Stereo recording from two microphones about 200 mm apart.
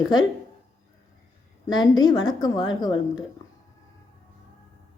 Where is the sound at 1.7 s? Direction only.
20° left (ahead or behind).